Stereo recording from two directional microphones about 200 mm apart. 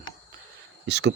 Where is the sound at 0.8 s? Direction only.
60° right (ahead or behind).